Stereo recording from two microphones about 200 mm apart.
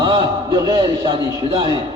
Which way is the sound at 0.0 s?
20° right (ahead or behind).